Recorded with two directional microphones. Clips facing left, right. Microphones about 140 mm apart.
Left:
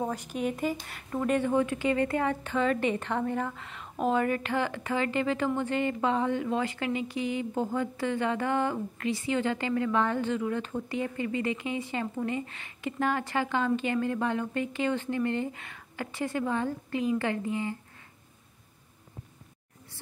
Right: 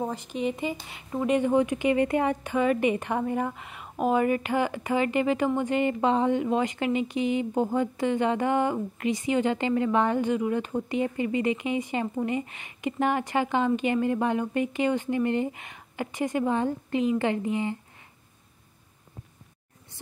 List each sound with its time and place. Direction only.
0.3 s speech: 5° left (ahead or behind)
0.8 s a woman's voice: 10° right (ahead or behind)